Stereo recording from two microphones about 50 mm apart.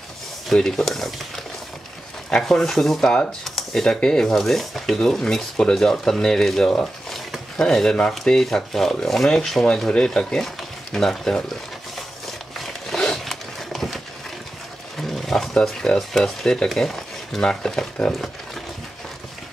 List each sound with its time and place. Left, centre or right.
0.7 s speech: centre
2.2 s speech: centre
12.5 s a sound: centre
15.0 s roaring cats: centre
16.1 s speech: centre